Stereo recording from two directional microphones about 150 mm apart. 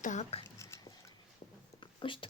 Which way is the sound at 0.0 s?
55° left (ahead or behind).